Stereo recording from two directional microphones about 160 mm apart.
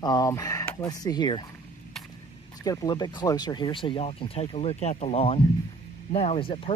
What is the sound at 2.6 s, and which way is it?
Speech, 25° left (ahead or behind).